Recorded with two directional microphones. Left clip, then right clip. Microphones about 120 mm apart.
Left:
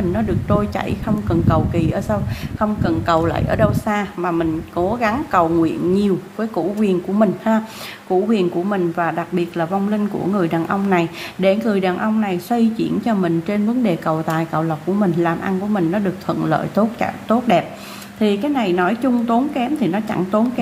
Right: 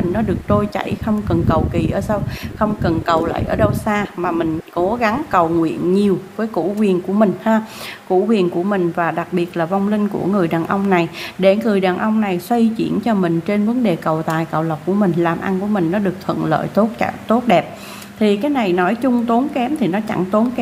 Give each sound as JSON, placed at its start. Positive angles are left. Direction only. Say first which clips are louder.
{"t": 0.1, "sound": "a woman's voice", "louder": "right 3 dB", "side_deg": -15}
{"t": 3.3, "sound": "a woman's voice", "louder": "even", "side_deg": 5}
{"t": 3.8, "sound": "speech", "louder": "right 1 dB", "side_deg": -10}